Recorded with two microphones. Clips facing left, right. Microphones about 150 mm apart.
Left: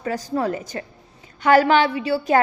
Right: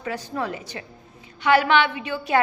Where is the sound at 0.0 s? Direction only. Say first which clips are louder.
Left 5 dB; 40° left (ahead or behind).